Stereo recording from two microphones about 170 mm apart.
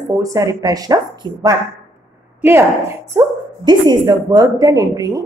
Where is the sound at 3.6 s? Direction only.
25° right (ahead or behind).